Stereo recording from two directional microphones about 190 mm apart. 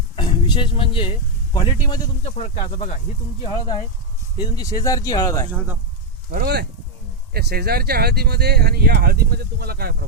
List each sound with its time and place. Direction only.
0.2 s a man's voice: 25° left (ahead or behind)
2.2 s speech: 35° left (ahead or behind)
3.4 s a man's voice: 25° left (ahead or behind)
5.5 s speech: 10° right (ahead or behind)
6.3 s speech: 55° right (ahead or behind)